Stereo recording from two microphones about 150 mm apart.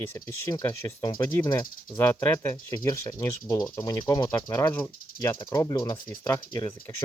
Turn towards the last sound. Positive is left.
turn(degrees=20)  # may be behind; listen again after turning